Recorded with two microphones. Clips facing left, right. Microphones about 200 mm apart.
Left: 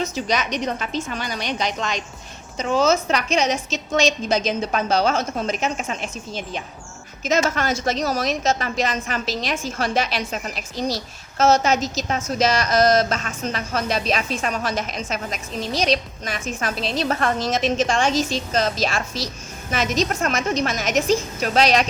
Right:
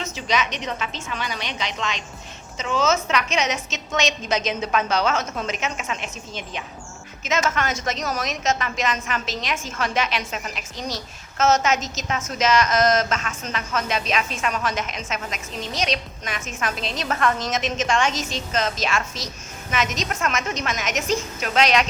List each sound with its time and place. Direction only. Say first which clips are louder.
0.0 s a woman's voice: left 2 dB; 40° left (ahead or behind)